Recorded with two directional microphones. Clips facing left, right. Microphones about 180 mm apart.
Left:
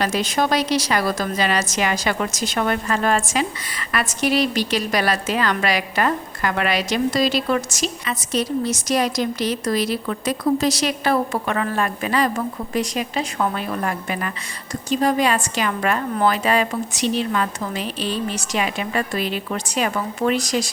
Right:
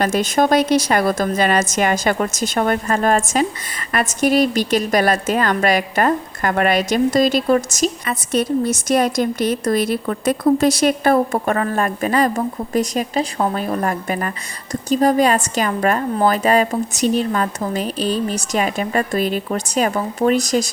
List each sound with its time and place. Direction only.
0.0 s a woman's voice: 50° right (ahead or behind)